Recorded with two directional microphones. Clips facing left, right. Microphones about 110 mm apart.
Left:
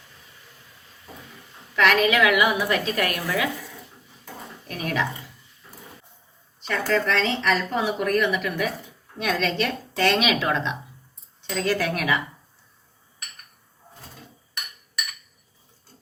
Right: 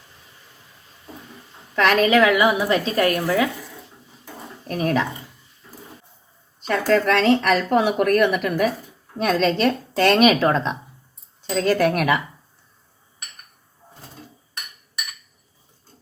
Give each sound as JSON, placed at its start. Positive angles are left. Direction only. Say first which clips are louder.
{"t": 1.7, "sound": "a woman's voice", "louder": "right 3 dB", "side_deg": -40}
{"t": 4.6, "sound": "speech", "louder": "right 6 dB", "side_deg": -35}
{"t": 6.6, "sound": "speech", "louder": "right 5 dB", "side_deg": -45}
{"t": 7.1, "sound": "a woman's voice", "louder": "right 6 dB", "side_deg": -60}